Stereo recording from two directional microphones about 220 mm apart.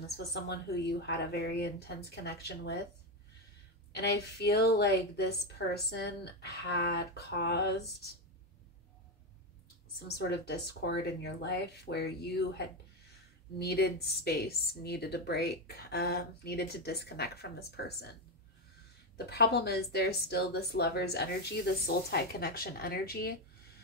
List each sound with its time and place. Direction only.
0.0 s a woman's voice: 50° left (ahead or behind)
3.9 s a woman's voice: 50° left (ahead or behind)
9.9 s a woman's voice: 50° left (ahead or behind)
13.7 s a woman's voice: 45° left (ahead or behind)
19.1 s a woman's voice: 45° left (ahead or behind)